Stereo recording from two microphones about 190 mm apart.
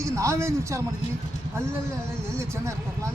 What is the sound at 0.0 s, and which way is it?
Speech, 15° right (ahead or behind).